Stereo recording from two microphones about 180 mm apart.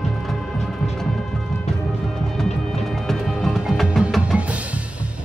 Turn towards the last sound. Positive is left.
turn(degrees=-5)  # may be behind; listen again after turning